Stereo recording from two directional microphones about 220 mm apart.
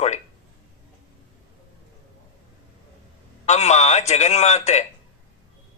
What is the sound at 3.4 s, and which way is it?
Speech, 30° left (ahead or behind).